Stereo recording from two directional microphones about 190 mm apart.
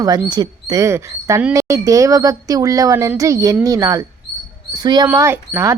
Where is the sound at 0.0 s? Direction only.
20° right (ahead or behind).